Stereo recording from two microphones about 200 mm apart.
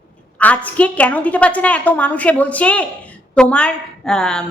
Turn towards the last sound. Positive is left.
turn(degrees=5)  # may be behind; listen again after turning